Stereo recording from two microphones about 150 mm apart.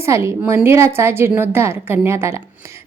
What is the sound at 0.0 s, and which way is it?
A woman's voice, 20° right (ahead or behind).